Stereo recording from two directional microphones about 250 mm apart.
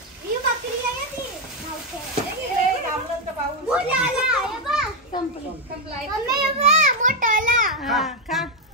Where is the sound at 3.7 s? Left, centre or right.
Centre.